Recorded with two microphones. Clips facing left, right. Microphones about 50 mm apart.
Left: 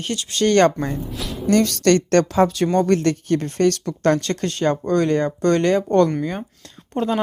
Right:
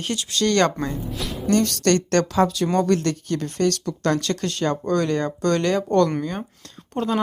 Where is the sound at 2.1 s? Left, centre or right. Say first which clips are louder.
Left 3 dB; centre.